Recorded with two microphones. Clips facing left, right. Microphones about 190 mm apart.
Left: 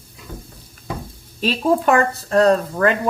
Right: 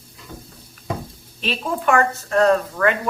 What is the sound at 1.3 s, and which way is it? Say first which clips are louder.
Speech: left 7 dB; 40° left (ahead or behind).